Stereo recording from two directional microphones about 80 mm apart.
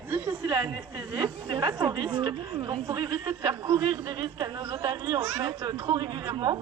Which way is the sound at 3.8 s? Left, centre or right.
Right.